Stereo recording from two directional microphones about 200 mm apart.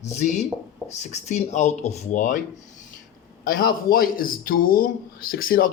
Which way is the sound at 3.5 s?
45° left (ahead or behind).